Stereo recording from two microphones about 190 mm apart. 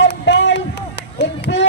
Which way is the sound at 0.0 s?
70° left (ahead or behind).